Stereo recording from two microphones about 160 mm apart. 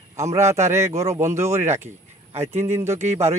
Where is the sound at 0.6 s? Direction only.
15° right (ahead or behind).